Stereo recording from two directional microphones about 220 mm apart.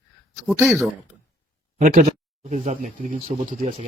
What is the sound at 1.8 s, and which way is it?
Speech, 35° right (ahead or behind).